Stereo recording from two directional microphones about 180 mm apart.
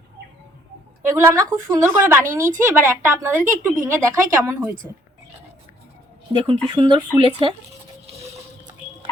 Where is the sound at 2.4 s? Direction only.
45° right (ahead or behind).